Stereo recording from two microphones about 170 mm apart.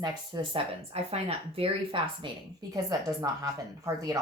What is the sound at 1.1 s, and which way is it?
A woman's voice, 35° right (ahead or behind).